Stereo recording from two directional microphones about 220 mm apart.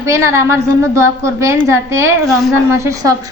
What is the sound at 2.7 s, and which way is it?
Speech, 15° right (ahead or behind).